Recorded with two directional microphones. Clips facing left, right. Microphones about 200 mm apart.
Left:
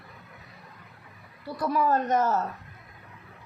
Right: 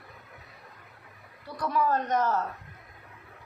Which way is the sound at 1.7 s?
10° left (ahead or behind).